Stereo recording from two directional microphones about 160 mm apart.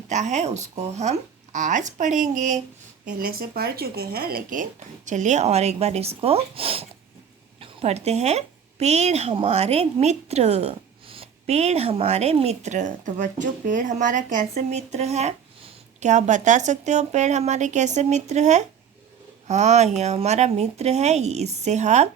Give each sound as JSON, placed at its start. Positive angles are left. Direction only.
{"t": 0.1, "sound": "a woman's voice", "side_deg": -45}
{"t": 3.1, "sound": "a woman's voice", "side_deg": -65}